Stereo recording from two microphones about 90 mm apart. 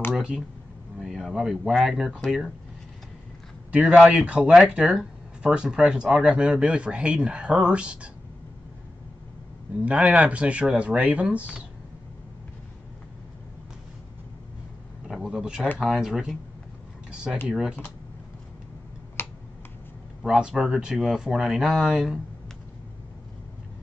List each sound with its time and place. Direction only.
0.1 s a sound: 10° right (ahead or behind)
0.9 s speech: 5° right (ahead or behind)
3.8 s speech: 10° right (ahead or behind)
9.8 s speech: 15° right (ahead or behind)
15.0 s speech: 5° right (ahead or behind)
19.2 s finger snapping: 25° left (ahead or behind)
20.2 s speech: 10° right (ahead or behind)